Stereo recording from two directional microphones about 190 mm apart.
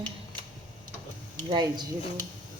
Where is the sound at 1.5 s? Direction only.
20° right (ahead or behind).